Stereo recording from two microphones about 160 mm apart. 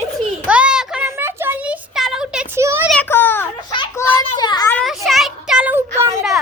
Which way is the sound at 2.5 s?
15° right (ahead or behind).